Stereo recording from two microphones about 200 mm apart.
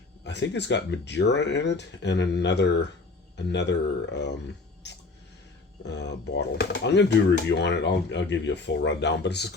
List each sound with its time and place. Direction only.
0.3 s speech: 60° left (ahead or behind)
4.8 s a sound: 60° left (ahead or behind)
5.8 s speech: 60° left (ahead or behind)